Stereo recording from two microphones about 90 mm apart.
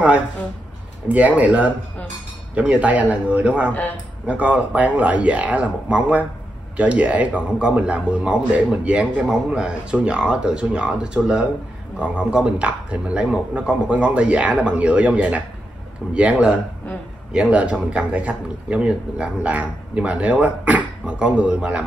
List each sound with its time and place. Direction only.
1.0 s a man's voice: 15° right (ahead or behind)
3.7 s a man's voice: 15° left (ahead or behind)
4.3 s a man's voice: 15° right (ahead or behind)